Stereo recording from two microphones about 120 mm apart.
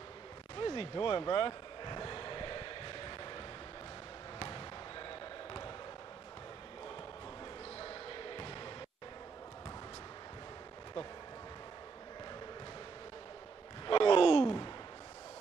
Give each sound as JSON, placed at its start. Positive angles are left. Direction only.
{"t": 0.6, "sound": "basketball bounce", "side_deg": 45}
{"t": 7.8, "sound": "basketball bounce", "side_deg": 45}
{"t": 13.8, "sound": "a sound", "side_deg": 50}